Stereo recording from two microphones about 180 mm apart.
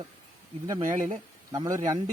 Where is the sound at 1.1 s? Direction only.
25° right (ahead or behind).